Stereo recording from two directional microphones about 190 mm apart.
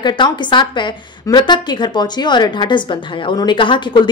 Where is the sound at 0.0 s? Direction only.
25° left (ahead or behind).